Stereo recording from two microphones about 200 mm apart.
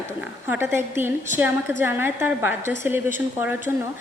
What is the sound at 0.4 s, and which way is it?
A woman's voice, 10° right (ahead or behind).